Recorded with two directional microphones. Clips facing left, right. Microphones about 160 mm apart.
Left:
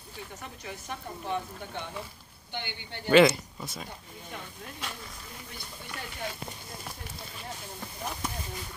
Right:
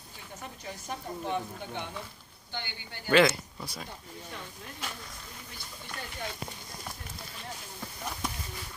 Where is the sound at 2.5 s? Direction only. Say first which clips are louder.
Left 2 dB; 25° left (ahead or behind).